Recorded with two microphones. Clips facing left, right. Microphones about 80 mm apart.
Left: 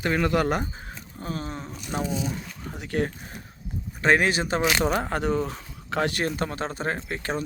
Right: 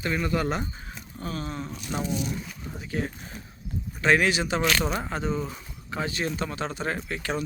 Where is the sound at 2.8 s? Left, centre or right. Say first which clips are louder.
Left 4 dB; left.